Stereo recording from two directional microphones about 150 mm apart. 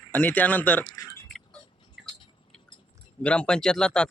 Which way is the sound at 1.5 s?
35° left (ahead or behind).